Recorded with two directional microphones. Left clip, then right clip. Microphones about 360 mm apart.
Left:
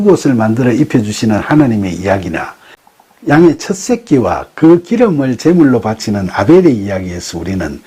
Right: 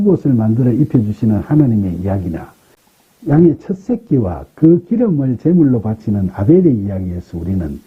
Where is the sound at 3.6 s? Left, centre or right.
Centre.